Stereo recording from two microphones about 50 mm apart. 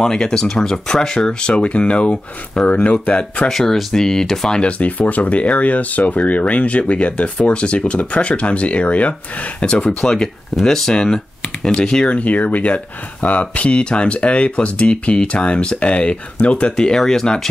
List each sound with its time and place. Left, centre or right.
0.0 s speech: centre
3.4 s speech: centre
4.6 s speech: left
12.2 s speech: left; by 17.5 s centre